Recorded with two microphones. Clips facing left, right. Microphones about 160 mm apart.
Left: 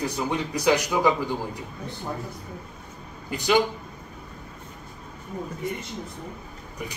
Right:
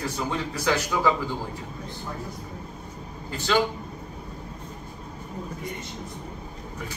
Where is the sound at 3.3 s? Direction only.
15° left (ahead or behind).